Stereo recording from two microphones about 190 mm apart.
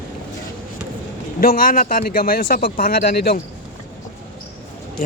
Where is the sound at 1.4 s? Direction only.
50° left (ahead or behind).